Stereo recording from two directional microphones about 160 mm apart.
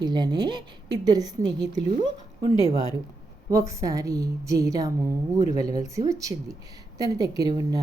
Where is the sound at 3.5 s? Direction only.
20° right (ahead or behind).